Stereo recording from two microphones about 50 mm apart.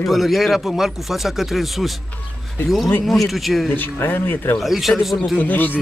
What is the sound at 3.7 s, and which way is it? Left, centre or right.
Speech, left.